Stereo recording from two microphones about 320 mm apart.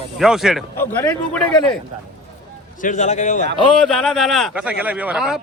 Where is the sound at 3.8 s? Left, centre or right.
Centre.